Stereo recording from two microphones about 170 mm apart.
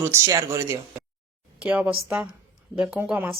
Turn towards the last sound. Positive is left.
turn(degrees=-5)  # may be behind; listen again after turning